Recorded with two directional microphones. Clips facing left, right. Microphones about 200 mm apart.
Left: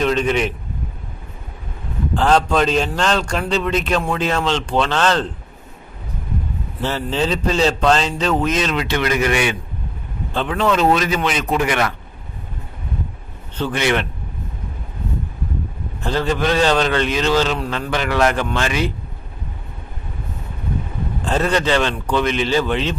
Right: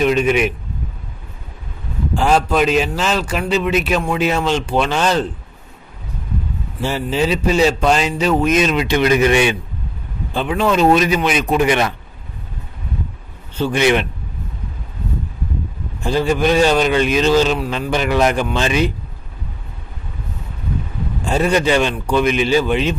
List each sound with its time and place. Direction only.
0.0 s a man's voice: 10° right (ahead or behind)
2.1 s a man's voice: 10° right (ahead or behind)
6.8 s a man's voice: 10° right (ahead or behind)
10.3 s a man's voice: 10° right (ahead or behind)
13.6 s a man's voice: 15° right (ahead or behind)
16.0 s a man's voice: 10° right (ahead or behind)
21.2 s a man's voice: 10° right (ahead or behind)